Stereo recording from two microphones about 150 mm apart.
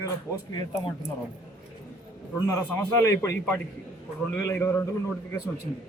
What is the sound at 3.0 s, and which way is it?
A man's voice, 20° left (ahead or behind).